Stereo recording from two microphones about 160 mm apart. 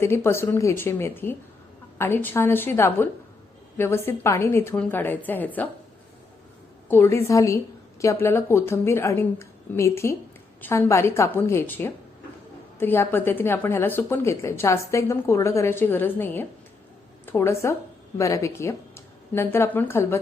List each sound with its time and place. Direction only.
0.0 s a woman's voice: 15° left (ahead or behind)
6.8 s a woman's voice: 15° left (ahead or behind)